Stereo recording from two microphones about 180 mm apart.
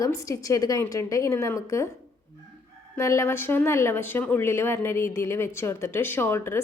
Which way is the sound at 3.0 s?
15° left (ahead or behind).